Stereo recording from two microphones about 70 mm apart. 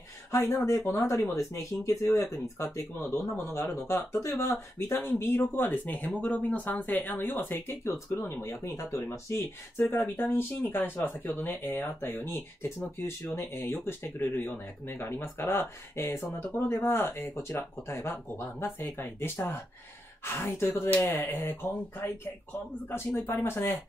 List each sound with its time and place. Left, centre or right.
0.3 s speech: left
4.9 s speech: left
9.8 s speech: left
22.8 s speech: left